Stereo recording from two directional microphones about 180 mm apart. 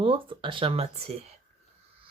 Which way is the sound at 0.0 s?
30° right (ahead or behind).